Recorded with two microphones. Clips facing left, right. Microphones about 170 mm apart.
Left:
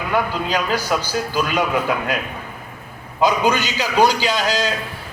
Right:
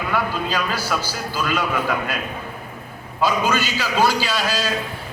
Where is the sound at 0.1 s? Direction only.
15° left (ahead or behind).